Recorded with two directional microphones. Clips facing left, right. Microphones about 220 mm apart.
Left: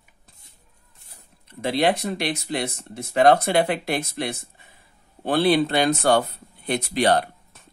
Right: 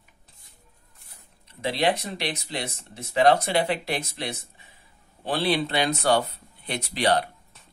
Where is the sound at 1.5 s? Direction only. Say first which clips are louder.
Left 3 dB; 50° left (ahead or behind).